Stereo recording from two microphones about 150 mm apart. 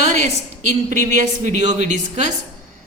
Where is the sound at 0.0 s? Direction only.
50° right (ahead or behind).